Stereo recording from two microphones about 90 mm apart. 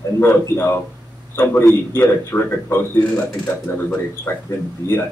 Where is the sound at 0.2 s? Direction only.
25° left (ahead or behind).